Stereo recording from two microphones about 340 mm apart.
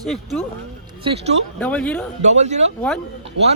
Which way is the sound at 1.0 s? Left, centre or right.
Centre.